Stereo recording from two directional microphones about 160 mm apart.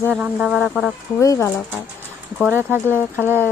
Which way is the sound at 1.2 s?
20° left (ahead or behind).